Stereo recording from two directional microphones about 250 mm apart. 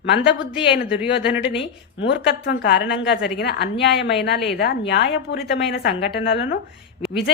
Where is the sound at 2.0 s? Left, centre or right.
Left.